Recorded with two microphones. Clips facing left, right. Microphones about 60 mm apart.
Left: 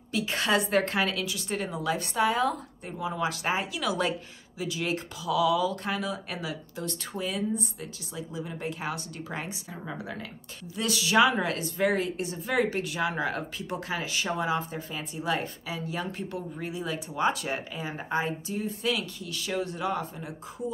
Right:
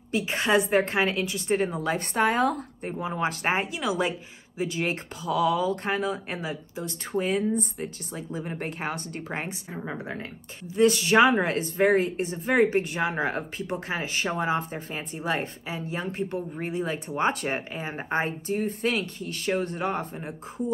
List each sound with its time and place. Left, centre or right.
0.1 s speech: right
3.8 s a woman's voice: right
4.6 s speech: right